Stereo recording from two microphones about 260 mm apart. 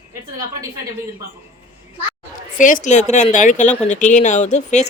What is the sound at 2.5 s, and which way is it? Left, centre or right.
Speech, left.